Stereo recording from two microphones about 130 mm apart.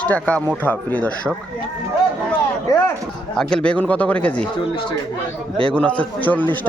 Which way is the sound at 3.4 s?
5° left (ahead or behind).